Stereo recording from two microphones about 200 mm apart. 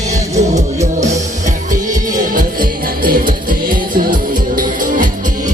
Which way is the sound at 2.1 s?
45° right (ahead or behind).